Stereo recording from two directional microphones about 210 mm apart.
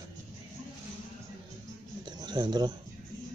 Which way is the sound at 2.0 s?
20° right (ahead or behind).